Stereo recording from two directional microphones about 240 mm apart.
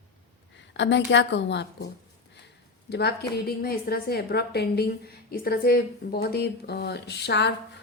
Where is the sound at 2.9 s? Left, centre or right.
Left.